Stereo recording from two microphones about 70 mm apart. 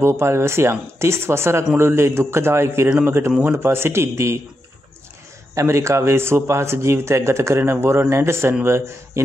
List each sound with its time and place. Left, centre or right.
0.0 s speech: right
5.5 s speech: right